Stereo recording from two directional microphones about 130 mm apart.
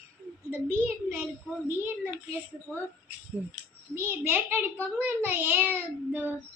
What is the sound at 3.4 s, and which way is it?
A child's voice, 10° right (ahead or behind).